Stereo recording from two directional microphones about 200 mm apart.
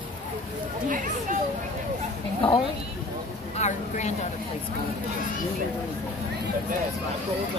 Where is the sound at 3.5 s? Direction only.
35° left (ahead or behind).